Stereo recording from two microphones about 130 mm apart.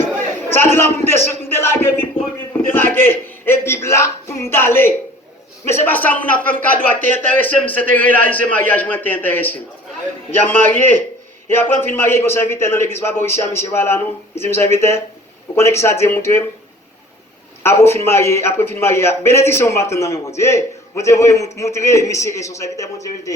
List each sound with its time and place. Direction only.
0.5 s a sound: 20° left (ahead or behind)
2.5 s a man's voice: 15° left (ahead or behind)
10.7 s a man's voice: 15° left (ahead or behind)
17.6 s a man's voice: 20° left (ahead or behind)